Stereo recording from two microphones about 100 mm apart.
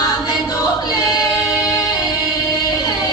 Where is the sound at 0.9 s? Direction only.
40° left (ahead or behind).